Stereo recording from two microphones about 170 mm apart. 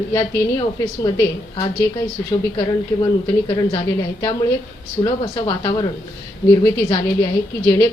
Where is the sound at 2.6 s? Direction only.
25° left (ahead or behind).